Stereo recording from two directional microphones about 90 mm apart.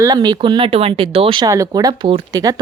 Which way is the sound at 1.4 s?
35° right (ahead or behind).